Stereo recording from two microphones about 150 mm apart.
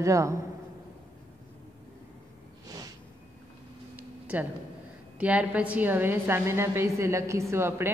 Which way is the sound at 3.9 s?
10° right (ahead or behind).